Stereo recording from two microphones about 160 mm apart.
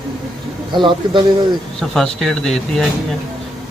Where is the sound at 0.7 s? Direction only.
30° right (ahead or behind).